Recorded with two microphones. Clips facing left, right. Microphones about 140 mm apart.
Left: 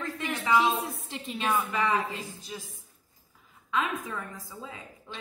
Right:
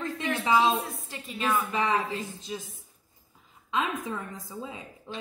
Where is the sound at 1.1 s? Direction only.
25° left (ahead or behind).